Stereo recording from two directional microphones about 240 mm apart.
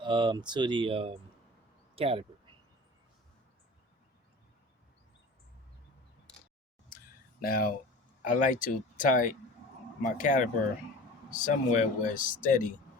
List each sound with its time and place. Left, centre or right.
0.0 s speech: centre
7.4 s speech: left